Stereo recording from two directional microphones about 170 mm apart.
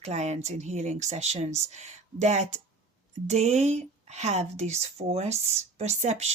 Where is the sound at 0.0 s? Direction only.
40° right (ahead or behind).